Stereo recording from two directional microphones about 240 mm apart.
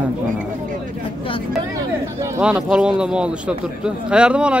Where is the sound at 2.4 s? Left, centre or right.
Centre.